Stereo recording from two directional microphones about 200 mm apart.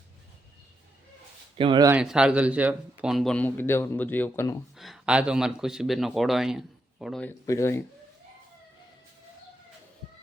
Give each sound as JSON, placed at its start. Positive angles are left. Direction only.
{"t": 1.5, "sound": "speech", "side_deg": -25}
{"t": 1.9, "sound": "a man's voice", "side_deg": -5}
{"t": 4.8, "sound": "a man's voice", "side_deg": 0}